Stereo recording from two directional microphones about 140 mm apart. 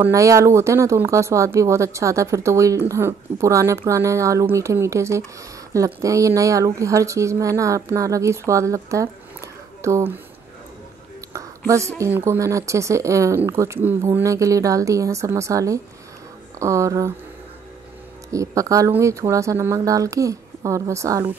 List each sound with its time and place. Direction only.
0.0 s speech: 20° right (ahead or behind)
11.1 s a sound: 20° right (ahead or behind)
12.0 s speech: 20° right (ahead or behind)
18.3 s speech: 25° right (ahead or behind)